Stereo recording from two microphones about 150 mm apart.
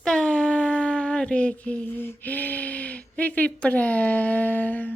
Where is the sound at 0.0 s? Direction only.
5° left (ahead or behind).